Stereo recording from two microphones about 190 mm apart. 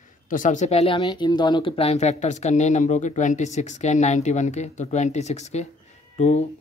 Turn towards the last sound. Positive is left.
turn(degrees=35)  # may be behind; listen again after turning